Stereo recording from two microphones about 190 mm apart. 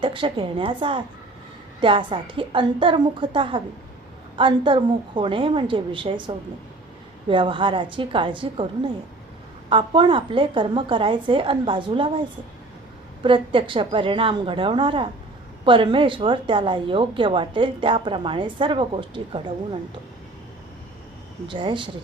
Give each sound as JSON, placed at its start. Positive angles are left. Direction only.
{"t": 0.0, "sound": "a woman's voice", "side_deg": -25}
{"t": 9.6, "sound": "a woman's voice", "side_deg": -25}
{"t": 13.2, "sound": "a woman's voice", "side_deg": -25}
{"t": 21.4, "sound": "a woman's voice", "side_deg": -25}